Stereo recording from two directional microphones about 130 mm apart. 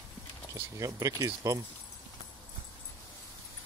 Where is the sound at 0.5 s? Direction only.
25° right (ahead or behind).